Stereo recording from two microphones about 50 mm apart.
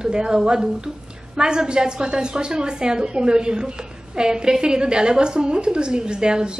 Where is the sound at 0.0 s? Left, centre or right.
Centre.